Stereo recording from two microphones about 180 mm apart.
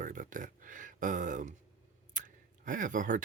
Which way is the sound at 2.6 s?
45° right (ahead or behind).